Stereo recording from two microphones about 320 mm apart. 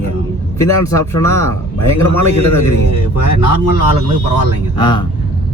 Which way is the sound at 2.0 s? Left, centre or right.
Left.